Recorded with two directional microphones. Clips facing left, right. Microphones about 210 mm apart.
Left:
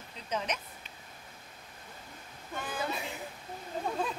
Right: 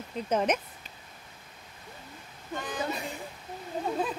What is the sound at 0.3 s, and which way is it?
Speech, 50° right (ahead or behind).